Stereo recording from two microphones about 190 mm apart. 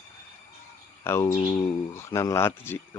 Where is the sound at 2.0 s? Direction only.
15° left (ahead or behind).